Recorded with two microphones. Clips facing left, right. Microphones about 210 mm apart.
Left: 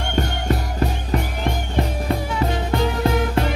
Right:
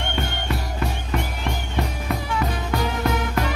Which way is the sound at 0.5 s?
35° left (ahead or behind).